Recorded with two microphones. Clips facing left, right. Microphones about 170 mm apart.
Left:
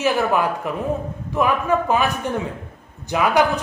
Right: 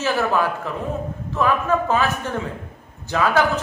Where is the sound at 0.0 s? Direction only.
15° left (ahead or behind).